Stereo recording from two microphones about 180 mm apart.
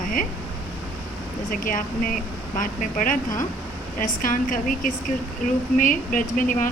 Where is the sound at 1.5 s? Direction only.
50° left (ahead or behind).